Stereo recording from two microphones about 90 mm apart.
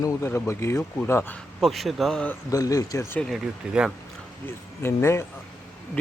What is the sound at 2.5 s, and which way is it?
Speech, 40° left (ahead or behind).